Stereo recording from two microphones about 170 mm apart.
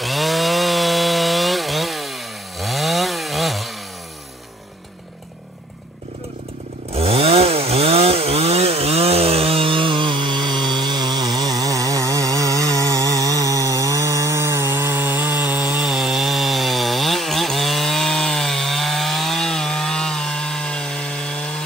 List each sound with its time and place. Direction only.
0.0 s chainsaw: centre (ahead or behind)
6.9 s chainsaw: 35° right (ahead or behind); by 21.6 s 5° left (ahead or behind)